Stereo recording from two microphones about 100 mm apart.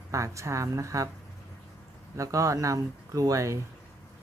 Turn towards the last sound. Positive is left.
turn(degrees=-35)  # may be behind; listen again after turning